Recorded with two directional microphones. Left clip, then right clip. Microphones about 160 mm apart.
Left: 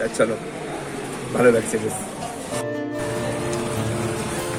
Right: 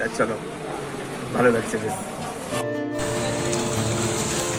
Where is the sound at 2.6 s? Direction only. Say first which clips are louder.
Even; centre (ahead or behind).